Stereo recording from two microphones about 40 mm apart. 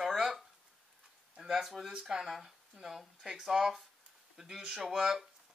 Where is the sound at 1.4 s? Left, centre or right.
Centre.